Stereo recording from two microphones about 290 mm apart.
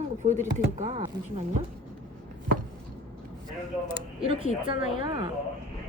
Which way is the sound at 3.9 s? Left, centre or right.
Centre.